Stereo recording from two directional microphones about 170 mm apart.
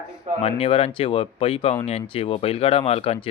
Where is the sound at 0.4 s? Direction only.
35° left (ahead or behind).